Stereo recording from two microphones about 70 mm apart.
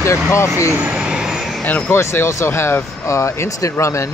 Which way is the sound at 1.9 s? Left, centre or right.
Left.